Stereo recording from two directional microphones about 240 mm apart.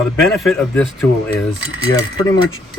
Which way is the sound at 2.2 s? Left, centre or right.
Centre.